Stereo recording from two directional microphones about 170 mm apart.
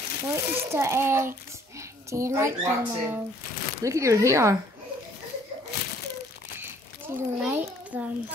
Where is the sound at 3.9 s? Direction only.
20° right (ahead or behind).